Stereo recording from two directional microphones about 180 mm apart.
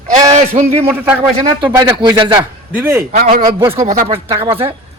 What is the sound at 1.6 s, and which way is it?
Speech, 10° right (ahead or behind).